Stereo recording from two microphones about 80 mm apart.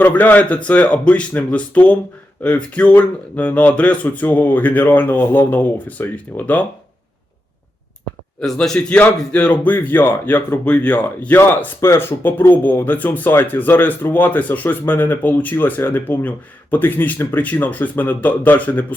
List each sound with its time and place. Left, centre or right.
0.0 s speech: left
8.4 s speech: centre
11.8 s speech: left